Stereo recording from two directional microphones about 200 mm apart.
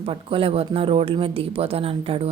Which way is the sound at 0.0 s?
25° right (ahead or behind).